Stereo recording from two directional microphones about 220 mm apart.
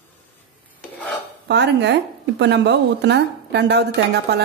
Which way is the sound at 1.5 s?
50° right (ahead or behind).